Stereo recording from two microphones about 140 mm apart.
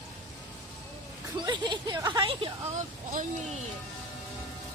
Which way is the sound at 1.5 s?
30° right (ahead or behind).